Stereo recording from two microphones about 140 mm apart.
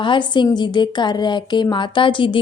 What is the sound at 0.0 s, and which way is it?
A woman's voice, 35° left (ahead or behind).